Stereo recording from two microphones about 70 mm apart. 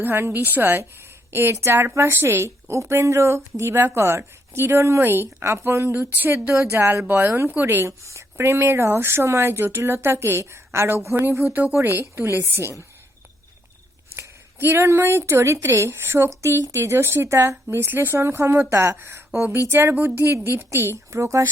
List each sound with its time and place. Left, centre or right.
0.0 s speech: right
5.9 s speech: right
6.5 s speech: right
14.2 s speech: right